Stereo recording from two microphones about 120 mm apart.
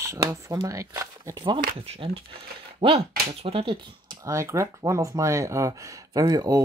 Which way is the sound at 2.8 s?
50° right (ahead or behind).